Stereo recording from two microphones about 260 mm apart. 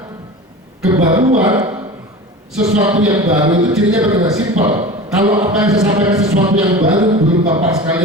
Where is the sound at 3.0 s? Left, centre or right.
Centre.